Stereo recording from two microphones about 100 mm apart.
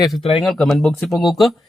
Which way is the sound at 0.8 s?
5° left (ahead or behind).